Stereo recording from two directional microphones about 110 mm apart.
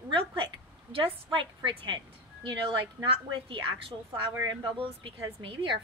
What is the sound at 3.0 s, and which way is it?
A woman's voice, 55° right (ahead or behind).